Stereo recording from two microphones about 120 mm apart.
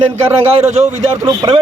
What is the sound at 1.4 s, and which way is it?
Speech, 35° right (ahead or behind).